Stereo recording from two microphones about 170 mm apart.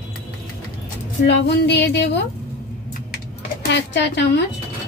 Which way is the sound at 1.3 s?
90° left.